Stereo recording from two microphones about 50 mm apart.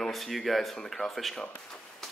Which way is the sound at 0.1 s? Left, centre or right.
Centre.